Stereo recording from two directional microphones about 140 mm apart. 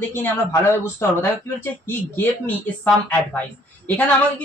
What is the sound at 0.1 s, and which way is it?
Speech, 15° left (ahead or behind).